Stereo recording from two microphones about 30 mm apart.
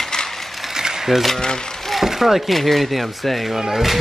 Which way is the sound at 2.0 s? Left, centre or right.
Centre.